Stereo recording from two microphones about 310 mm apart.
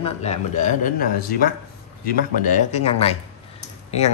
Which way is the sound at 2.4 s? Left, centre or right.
Left.